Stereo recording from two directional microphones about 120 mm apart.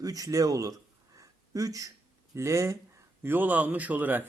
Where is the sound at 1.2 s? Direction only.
30° right (ahead or behind).